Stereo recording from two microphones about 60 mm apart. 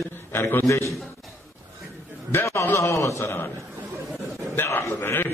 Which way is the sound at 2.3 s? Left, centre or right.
Left.